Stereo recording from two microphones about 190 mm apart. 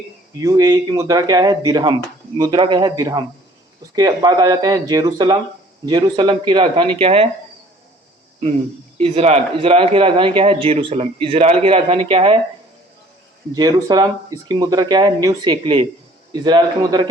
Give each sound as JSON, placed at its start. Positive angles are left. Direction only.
{"t": 0.3, "sound": "a man's voice", "side_deg": -20}
{"t": 9.0, "sound": "a man's voice", "side_deg": -30}
{"t": 13.5, "sound": "a man's voice", "side_deg": -20}